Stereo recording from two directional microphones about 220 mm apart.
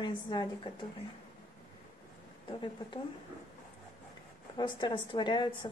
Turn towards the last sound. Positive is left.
turn(degrees=20)  # may be behind; listen again after turning